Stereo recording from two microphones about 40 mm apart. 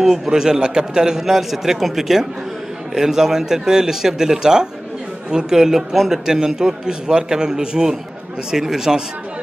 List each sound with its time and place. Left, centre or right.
0.0 s a man's voice: centre